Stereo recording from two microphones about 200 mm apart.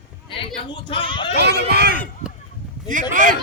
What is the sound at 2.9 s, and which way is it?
Speech, 40° right (ahead or behind).